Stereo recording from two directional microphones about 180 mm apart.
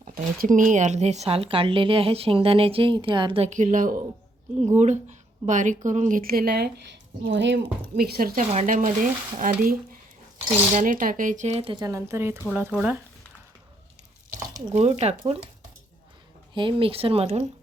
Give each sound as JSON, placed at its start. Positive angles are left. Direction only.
{"t": 0.1, "sound": "a woman's voice", "side_deg": -45}
{"t": 8.6, "sound": "stir", "side_deg": -45}
{"t": 10.8, "sound": "speech", "side_deg": -50}
{"t": 14.7, "sound": "speech", "side_deg": -35}
{"t": 16.6, "sound": "speech", "side_deg": -30}